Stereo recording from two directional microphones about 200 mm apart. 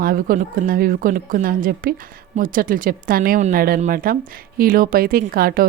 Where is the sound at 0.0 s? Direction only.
45° right (ahead or behind).